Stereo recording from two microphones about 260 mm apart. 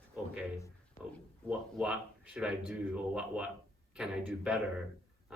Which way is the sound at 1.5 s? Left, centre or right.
Centre.